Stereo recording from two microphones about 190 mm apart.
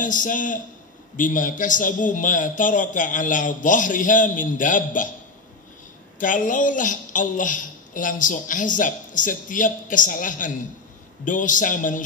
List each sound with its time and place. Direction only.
0.0 s speech: 45° left (ahead or behind)
6.1 s speech: 45° left (ahead or behind)